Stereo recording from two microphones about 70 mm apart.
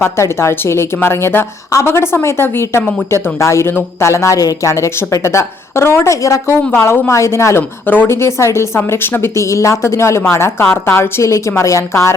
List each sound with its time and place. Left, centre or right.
0.0 s speech: left
6.5 s speech: left
7.9 s speech: left
11.2 s speech: left